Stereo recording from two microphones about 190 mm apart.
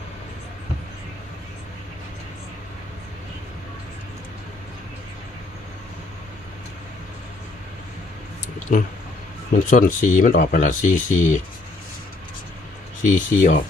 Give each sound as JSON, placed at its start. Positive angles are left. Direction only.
{"t": 8.7, "sound": "speech", "side_deg": 45}
{"t": 13.0, "sound": "speech", "side_deg": 45}